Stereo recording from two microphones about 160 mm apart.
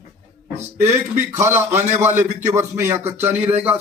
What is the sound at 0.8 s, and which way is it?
Speech, 15° right (ahead or behind).